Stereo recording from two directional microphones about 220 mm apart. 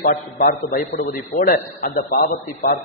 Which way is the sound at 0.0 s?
40° left (ahead or behind).